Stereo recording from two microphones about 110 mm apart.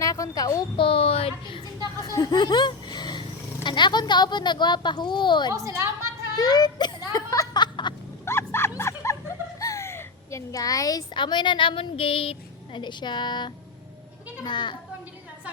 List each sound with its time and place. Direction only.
0.0 s a sound: 30° left (ahead or behind)
0.8 s a woman's voice: 55° left (ahead or behind)
2.0 s speech: 35° left (ahead or behind)
5.5 s a woman's voice: 30° right (ahead or behind)
6.3 s a sound: 40° left (ahead or behind)
8.2 s roaring cats: 20° left (ahead or behind)
8.8 s snicker: 25° left (ahead or behind)
9.6 s a child's voice: 30° left (ahead or behind); by 14.8 s 45° left (ahead or behind)